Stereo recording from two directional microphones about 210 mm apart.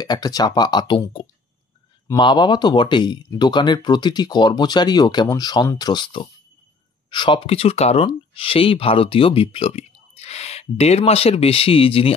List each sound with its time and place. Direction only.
0.0 s speech: 20° left (ahead or behind)